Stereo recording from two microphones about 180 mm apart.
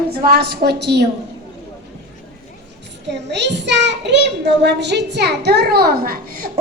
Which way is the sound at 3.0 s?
75° right (ahead or behind).